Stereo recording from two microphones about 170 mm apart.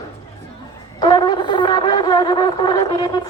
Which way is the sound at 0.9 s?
25° left (ahead or behind).